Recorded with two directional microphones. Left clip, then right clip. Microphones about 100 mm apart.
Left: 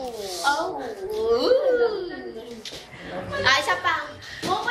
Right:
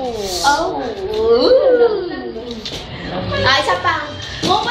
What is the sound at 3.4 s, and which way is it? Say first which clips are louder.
Speech: right 6 dB; 20° left (ahead or behind).